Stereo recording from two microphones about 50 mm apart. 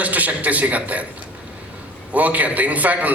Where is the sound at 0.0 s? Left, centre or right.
Right.